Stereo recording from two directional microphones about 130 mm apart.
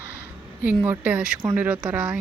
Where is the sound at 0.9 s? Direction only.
10° right (ahead or behind).